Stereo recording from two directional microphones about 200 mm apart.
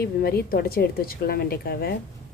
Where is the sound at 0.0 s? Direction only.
50° left (ahead or behind).